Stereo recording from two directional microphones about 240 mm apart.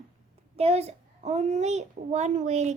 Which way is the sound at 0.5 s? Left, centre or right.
Right.